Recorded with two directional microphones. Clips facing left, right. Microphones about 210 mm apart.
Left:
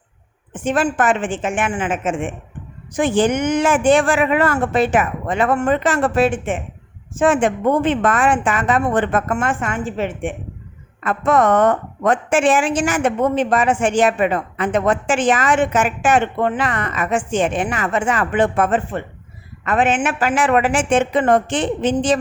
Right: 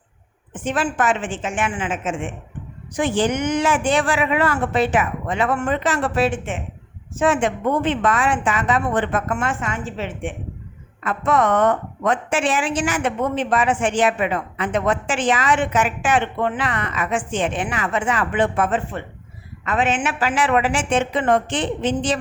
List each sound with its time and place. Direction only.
0.6 s a woman's voice: 45° left (ahead or behind)